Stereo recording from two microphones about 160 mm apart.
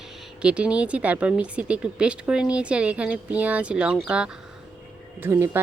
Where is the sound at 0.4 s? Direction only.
5° right (ahead or behind).